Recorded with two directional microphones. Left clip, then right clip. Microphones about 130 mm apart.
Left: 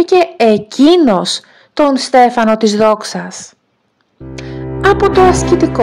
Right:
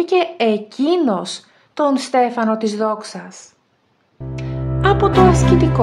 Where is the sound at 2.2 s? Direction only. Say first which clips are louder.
Left 8 dB; 55° left (ahead or behind).